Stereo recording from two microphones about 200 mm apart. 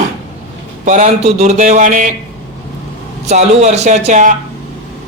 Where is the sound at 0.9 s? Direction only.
35° right (ahead or behind).